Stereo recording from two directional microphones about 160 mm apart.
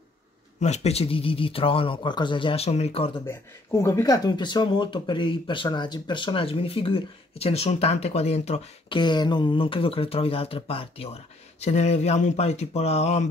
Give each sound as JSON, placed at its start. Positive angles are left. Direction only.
{"t": 0.6, "sound": "speech", "side_deg": 45}
{"t": 3.3, "sound": "speech", "side_deg": 15}